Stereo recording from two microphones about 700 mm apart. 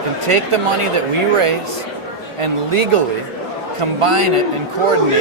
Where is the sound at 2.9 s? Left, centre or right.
Right.